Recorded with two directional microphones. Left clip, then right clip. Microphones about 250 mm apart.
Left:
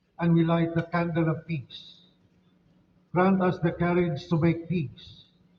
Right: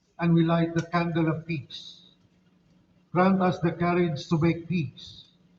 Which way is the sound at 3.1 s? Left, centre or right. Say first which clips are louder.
Right 1 dB; right.